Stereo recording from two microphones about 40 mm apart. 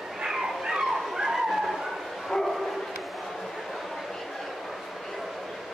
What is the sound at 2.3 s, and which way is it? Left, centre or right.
Bow-wow, left.